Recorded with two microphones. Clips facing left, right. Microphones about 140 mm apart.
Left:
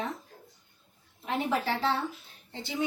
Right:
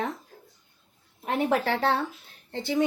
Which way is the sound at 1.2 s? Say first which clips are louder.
Right 4 dB; 60° right (ahead or behind).